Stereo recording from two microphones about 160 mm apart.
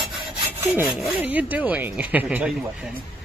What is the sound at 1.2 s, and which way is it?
Speech, 10° right (ahead or behind).